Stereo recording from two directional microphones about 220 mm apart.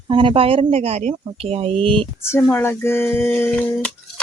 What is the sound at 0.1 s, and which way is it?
Speech, 25° right (ahead or behind).